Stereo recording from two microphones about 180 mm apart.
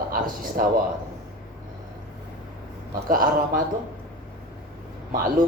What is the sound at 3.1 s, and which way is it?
Speech, 50° right (ahead or behind).